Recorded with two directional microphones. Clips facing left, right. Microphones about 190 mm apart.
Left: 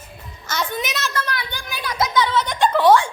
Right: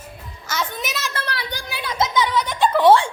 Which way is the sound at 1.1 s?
35° right (ahead or behind).